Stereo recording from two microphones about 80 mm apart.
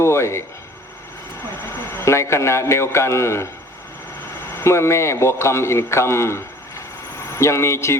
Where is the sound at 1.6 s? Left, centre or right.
Left.